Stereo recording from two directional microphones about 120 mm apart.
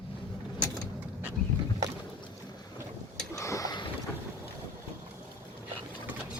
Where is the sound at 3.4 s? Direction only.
25° left (ahead or behind).